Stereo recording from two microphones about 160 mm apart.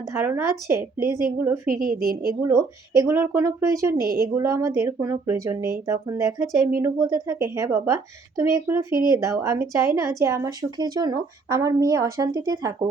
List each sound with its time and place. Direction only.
0.1 s speech: 15° right (ahead or behind)
1.6 s a woman's voice: 60° right (ahead or behind)
2.2 s speech: 20° right (ahead or behind)